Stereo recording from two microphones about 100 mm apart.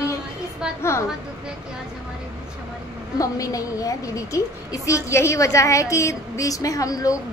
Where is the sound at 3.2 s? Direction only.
35° left (ahead or behind).